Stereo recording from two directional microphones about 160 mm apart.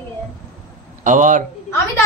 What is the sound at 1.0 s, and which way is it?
Speech, 55° right (ahead or behind).